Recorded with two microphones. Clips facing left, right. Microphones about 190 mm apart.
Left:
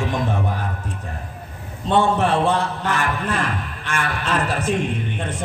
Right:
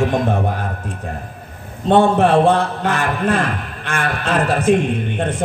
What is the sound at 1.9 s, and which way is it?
A man's voice, 55° right (ahead or behind).